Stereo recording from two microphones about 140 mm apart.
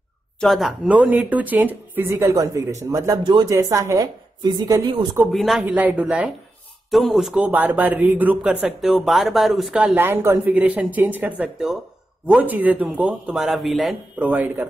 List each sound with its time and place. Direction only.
0.4 s a man's voice: centre (ahead or behind); by 5.0 s 30° right (ahead or behind)
5.2 s a man's voice: centre (ahead or behind)
14.1 s a man's voice: 10° right (ahead or behind)